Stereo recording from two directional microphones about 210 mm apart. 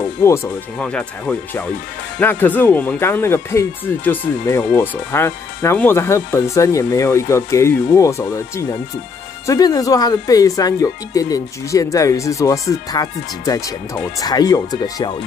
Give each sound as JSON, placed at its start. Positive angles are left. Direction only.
{"t": 0.2, "sound": "speech", "side_deg": 10}